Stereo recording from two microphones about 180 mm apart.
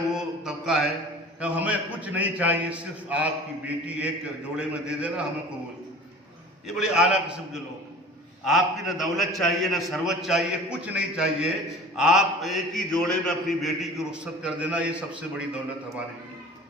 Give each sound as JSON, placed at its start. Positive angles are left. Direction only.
{"t": 0.1, "sound": "a sound", "side_deg": -5}
{"t": 1.4, "sound": "a man's voice", "side_deg": -10}
{"t": 6.7, "sound": "a man's voice", "side_deg": -5}